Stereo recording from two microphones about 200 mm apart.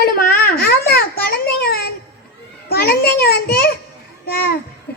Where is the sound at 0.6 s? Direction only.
50° left (ahead or behind).